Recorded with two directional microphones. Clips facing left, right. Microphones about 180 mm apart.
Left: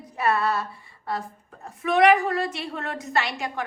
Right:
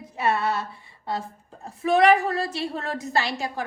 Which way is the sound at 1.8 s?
35° right (ahead or behind).